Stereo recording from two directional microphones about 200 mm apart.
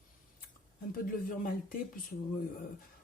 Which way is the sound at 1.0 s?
45° left (ahead or behind).